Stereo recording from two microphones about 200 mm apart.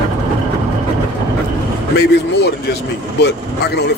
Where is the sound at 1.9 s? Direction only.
55° left (ahead or behind).